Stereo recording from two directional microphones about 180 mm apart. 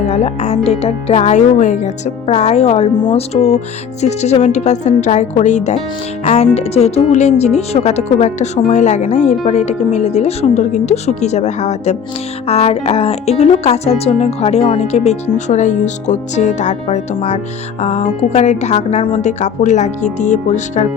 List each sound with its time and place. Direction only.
0.0 s speech: 35° left (ahead or behind)